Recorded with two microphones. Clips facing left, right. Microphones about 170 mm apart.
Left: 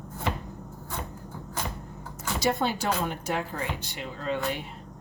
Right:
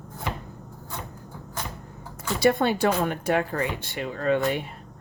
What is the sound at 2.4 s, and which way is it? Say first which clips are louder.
Speech: right 6 dB; 60° right (ahead or behind).